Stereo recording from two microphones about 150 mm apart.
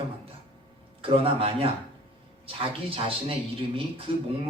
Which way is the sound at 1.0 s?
40° right (ahead or behind).